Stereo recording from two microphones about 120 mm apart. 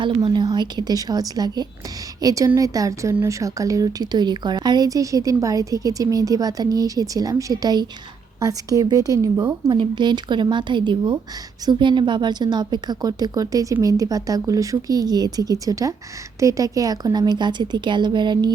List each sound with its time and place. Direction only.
0.0 s a woman's voice: 40° right (ahead or behind)